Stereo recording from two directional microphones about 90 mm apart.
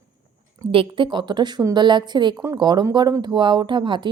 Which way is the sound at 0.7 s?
75° right (ahead or behind).